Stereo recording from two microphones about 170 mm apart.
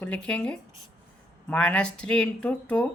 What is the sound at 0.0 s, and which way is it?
Speech, 5° left (ahead or behind).